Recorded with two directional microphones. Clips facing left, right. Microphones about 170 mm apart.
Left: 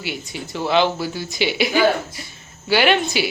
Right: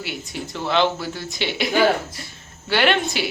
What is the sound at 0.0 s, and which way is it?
Speech, centre (ahead or behind).